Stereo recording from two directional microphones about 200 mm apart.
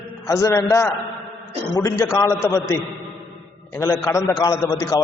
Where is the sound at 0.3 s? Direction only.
15° left (ahead or behind).